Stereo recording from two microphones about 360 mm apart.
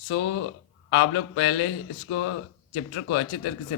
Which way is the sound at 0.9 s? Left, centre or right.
Left.